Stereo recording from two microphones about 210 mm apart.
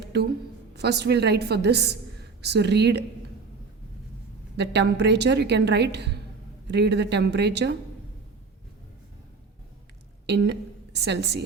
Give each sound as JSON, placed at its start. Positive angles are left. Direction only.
{"t": 0.1, "sound": "a woman's voice", "side_deg": -50}
{"t": 4.5, "sound": "a woman's voice", "side_deg": -55}
{"t": 10.2, "sound": "a woman's voice", "side_deg": -55}